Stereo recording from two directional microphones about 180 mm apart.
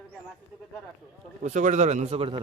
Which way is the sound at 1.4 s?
45° right (ahead or behind).